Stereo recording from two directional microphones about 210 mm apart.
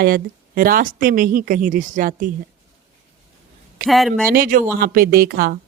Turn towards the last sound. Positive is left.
turn(degrees=-45)  # may be behind; listen again after turning